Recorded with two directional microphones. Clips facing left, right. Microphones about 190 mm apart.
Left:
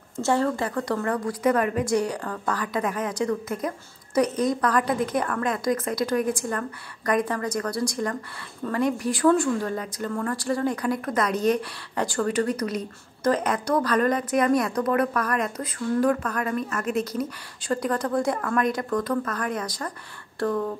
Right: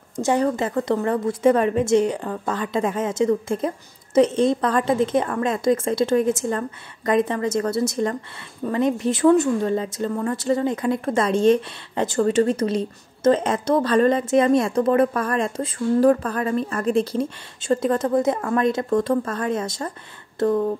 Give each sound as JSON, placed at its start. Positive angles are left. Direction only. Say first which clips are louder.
{"t": 0.1, "sound": "speech", "louder": "right 3 dB", "side_deg": -15}